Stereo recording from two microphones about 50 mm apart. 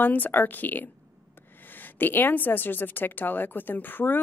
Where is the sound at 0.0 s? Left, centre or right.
Left.